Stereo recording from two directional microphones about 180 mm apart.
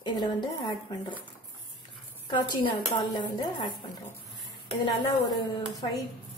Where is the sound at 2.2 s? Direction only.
25° left (ahead or behind).